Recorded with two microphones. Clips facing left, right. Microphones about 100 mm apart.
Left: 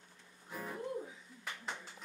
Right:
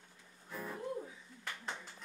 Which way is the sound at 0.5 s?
20° left (ahead or behind).